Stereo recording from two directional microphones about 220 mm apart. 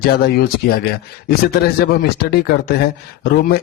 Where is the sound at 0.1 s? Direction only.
45° left (ahead or behind).